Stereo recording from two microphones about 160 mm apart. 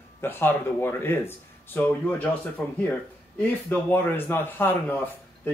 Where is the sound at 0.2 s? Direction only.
15° left (ahead or behind).